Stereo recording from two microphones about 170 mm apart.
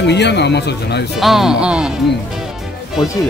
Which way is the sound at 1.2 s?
Centre (ahead or behind).